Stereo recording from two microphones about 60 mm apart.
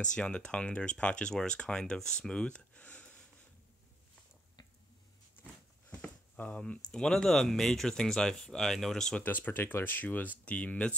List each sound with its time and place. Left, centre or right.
0.0 s speech: centre
5.9 s a sound: left
6.6 s speech: centre
9.2 s speech: left